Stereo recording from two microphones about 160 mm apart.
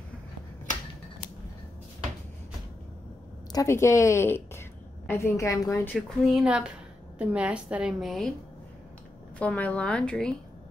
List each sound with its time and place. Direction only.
3.5 s a woman's voice: 15° left (ahead or behind)
5.9 s a woman's voice: 5° right (ahead or behind)
9.4 s a woman's voice: 10° left (ahead or behind)